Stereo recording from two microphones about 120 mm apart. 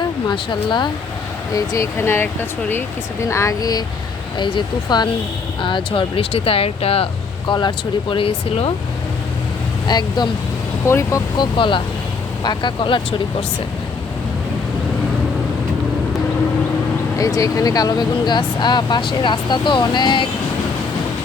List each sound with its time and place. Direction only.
0.3 s speech: 40° left (ahead or behind)
1.5 s speech: 25° left (ahead or behind); by 8.7 s 45° left (ahead or behind)
9.8 s speech: 35° left (ahead or behind)
10.8 s speech: 25° left (ahead or behind)
11.3 s speech: 45° left (ahead or behind)
17.2 s speech: 30° left (ahead or behind)